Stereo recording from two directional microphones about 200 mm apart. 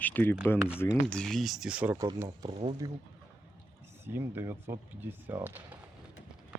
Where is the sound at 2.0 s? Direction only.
15° right (ahead or behind).